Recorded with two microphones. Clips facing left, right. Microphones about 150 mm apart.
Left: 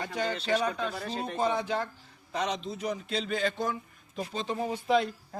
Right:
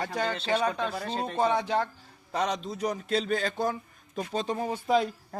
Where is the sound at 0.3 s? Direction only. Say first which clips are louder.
Left 1 dB; 30° right (ahead or behind).